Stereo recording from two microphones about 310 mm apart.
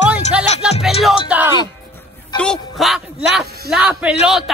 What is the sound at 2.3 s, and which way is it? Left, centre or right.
A man's voice, centre.